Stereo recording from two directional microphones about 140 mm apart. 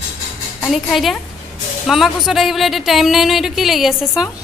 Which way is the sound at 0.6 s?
Centre (ahead or behind).